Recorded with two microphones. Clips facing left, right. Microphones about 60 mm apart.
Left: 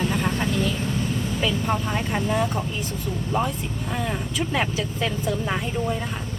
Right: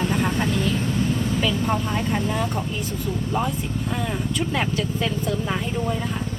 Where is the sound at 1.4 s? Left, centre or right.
Centre.